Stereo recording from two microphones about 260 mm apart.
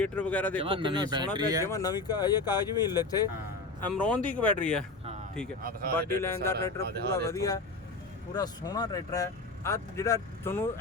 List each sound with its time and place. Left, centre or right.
0.0 s speech: centre
0.6 s speech: centre
1.6 s speech: centre
5.9 s speech: centre